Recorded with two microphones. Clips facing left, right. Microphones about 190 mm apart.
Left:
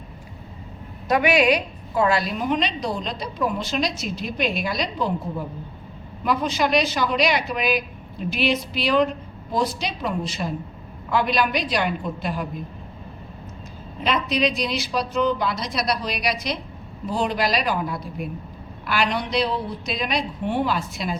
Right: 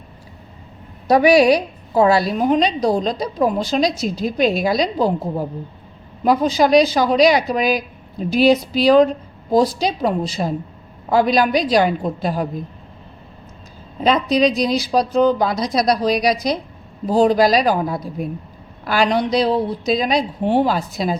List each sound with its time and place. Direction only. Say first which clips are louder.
1.0 s a woman's voice: right 7 dB; 35° right (ahead or behind)
14.0 s a woman's voice: right 7 dB; 40° right (ahead or behind)